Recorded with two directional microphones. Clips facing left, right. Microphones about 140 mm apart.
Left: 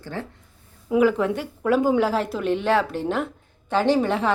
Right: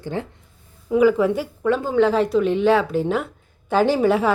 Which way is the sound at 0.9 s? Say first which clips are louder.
Right 3 dB; centre (ahead or behind).